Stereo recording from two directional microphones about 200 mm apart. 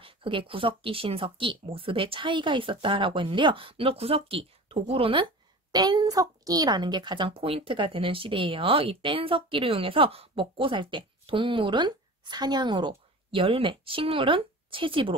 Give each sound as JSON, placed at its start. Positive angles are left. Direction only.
{"t": 0.0, "sound": "a woman's voice", "side_deg": -25}